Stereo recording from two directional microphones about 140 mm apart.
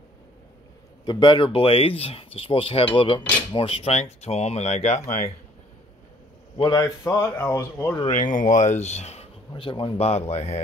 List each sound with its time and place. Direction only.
1.0 s speech: 35° left (ahead or behind); by 5.0 s 50° left (ahead or behind)
6.5 s speech: 30° left (ahead or behind)
8.1 s speech: 65° left (ahead or behind)
9.5 s speech: 35° left (ahead or behind)